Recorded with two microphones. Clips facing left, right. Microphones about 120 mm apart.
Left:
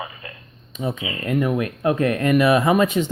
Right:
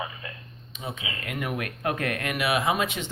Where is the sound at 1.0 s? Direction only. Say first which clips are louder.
Left 11 dB; 40° left (ahead or behind).